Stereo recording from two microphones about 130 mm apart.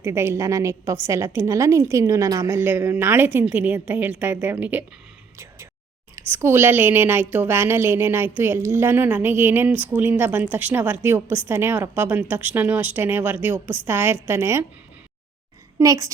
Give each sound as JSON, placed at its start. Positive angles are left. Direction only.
{"t": 0.0, "sound": "a woman's voice", "side_deg": -20}
{"t": 6.1, "sound": "a woman's voice", "side_deg": -20}
{"t": 15.8, "sound": "a woman's voice", "side_deg": -25}